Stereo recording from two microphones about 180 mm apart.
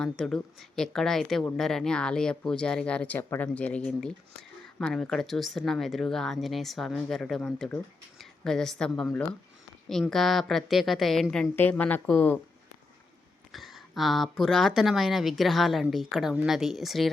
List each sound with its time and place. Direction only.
0.0 s a woman's voice: 5° left (ahead or behind)
13.5 s a woman's voice: centre (ahead or behind)